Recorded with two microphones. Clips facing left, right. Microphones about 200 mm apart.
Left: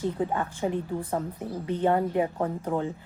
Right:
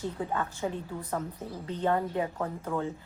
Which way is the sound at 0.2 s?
20° left (ahead or behind).